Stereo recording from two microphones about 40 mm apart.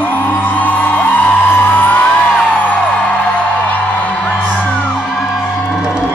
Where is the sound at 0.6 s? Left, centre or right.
Left.